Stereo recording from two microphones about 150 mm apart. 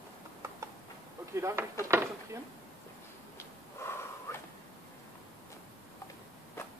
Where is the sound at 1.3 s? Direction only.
20° right (ahead or behind).